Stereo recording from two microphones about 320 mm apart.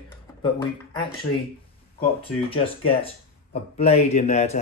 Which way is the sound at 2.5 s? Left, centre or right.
Centre.